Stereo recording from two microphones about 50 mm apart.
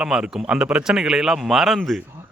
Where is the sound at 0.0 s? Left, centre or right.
Centre.